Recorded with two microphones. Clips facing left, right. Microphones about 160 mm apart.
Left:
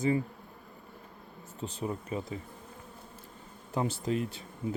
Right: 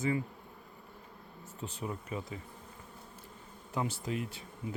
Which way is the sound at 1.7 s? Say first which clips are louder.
Left 4 dB; 30° left (ahead or behind).